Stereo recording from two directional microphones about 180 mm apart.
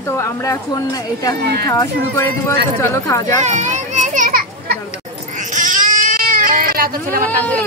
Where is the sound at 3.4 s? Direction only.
40° right (ahead or behind).